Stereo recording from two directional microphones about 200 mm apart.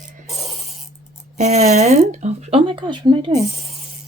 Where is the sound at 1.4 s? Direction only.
35° right (ahead or behind).